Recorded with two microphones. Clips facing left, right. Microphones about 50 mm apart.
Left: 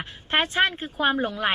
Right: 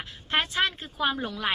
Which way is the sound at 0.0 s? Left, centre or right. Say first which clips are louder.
Left 3 dB; left.